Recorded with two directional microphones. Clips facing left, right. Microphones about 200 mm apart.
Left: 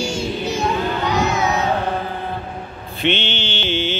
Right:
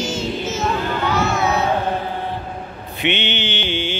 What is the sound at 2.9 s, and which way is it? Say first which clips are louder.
Mantra: left 1 dB; 15° right (ahead or behind).